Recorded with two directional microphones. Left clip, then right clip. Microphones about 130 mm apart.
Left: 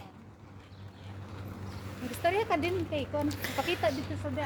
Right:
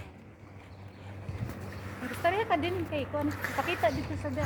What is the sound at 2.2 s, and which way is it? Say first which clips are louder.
Speech: even; 40° left (ahead or behind).